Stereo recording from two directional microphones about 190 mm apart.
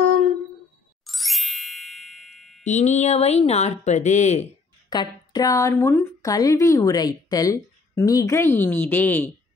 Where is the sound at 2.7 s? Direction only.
40° left (ahead or behind).